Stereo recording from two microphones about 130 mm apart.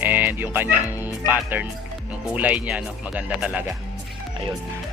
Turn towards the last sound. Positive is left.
turn(degrees=-10)  # may be behind; listen again after turning